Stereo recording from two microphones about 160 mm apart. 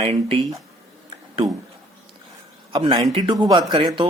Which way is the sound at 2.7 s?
35° right (ahead or behind).